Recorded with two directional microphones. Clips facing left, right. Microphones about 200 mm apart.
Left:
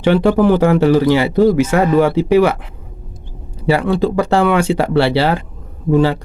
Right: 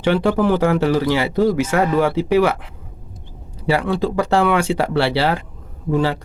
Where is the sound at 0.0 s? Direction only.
25° left (ahead or behind).